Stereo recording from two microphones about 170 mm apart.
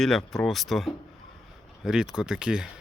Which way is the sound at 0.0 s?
Centre (ahead or behind).